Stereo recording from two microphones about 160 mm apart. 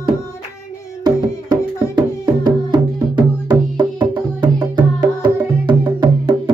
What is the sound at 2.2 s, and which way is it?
Music, 25° right (ahead or behind).